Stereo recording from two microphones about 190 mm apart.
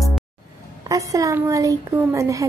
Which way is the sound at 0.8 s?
15° right (ahead or behind).